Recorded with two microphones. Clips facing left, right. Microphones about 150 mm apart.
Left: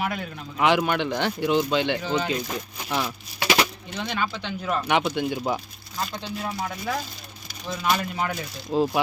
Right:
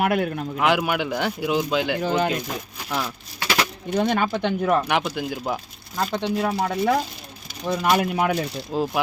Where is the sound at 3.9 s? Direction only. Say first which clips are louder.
Right 8 dB; 50° right (ahead or behind).